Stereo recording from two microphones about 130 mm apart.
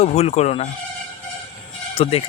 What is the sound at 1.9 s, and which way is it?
Speech, 50° left (ahead or behind).